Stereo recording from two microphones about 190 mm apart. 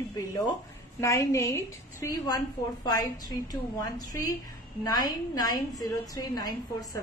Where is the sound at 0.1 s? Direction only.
15° left (ahead or behind).